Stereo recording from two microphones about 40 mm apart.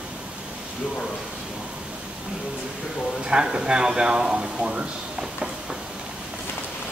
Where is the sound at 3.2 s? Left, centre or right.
Right.